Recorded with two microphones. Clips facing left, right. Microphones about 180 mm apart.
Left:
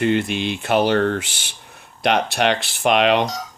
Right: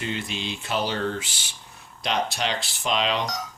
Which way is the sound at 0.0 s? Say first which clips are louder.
Left 11 dB; 65° left (ahead or behind).